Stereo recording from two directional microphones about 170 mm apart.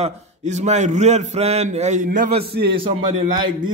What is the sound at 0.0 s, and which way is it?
A man's voice, 40° right (ahead or behind).